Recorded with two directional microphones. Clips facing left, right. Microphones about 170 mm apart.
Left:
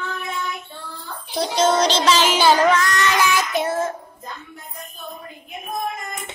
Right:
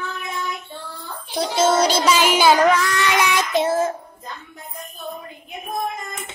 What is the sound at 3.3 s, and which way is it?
Child singing, 25° right (ahead or behind).